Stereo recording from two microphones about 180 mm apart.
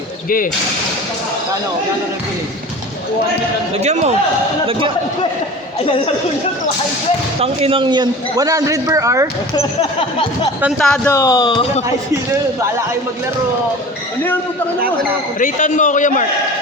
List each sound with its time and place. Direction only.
3.8 s speech: 40° right (ahead or behind)
7.3 s a man's voice: 35° right (ahead or behind); by 9.2 s 20° right (ahead or behind)
10.6 s a man's voice: centre (ahead or behind)
11.1 s speech: 20° left (ahead or behind)
15.4 s a man's voice: 45° left (ahead or behind)